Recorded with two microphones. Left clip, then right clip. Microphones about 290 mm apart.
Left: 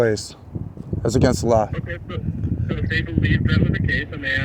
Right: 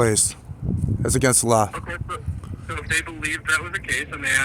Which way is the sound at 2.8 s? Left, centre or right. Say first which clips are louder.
Even; right.